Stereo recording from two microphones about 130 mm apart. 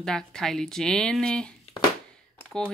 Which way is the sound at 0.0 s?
5° left (ahead or behind).